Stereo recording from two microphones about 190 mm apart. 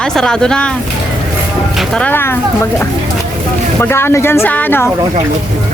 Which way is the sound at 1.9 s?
10° left (ahead or behind).